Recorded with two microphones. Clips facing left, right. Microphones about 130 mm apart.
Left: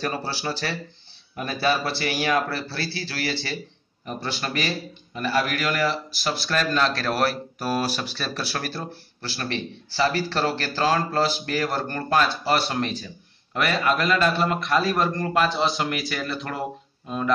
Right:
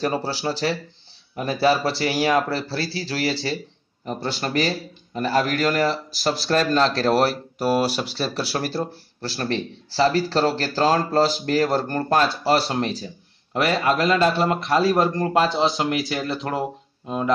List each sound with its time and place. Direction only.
0.0 s speech: 25° right (ahead or behind)